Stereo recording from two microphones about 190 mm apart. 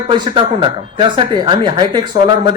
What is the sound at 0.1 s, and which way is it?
Speech, 25° right (ahead or behind).